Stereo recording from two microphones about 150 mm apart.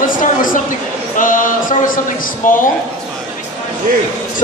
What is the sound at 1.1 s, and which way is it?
A man's voice, 65° left (ahead or behind).